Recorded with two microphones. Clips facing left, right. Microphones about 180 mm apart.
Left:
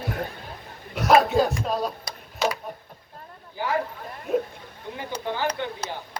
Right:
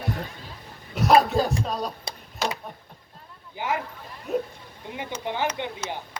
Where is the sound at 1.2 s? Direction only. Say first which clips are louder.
Left 2 dB; centre (ahead or behind).